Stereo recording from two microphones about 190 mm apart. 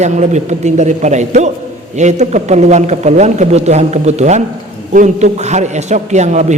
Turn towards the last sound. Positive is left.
turn(degrees=-40)  # may be behind; listen again after turning